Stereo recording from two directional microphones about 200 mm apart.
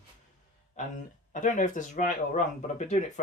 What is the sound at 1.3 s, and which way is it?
Speech, 40° left (ahead or behind).